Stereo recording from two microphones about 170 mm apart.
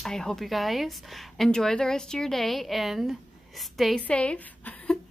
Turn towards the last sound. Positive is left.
turn(degrees=10)  # may be behind; listen again after turning